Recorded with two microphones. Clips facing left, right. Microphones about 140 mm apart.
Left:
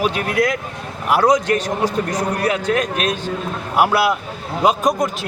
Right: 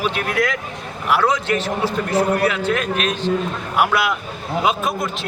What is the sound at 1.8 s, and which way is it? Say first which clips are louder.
Speech: right 1 dB; 15° left (ahead or behind).